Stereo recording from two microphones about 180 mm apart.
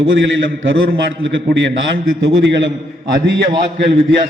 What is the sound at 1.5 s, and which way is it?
A man's voice, 80° right.